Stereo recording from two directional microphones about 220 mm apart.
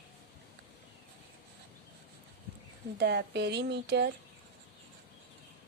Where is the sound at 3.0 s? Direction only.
50° right (ahead or behind).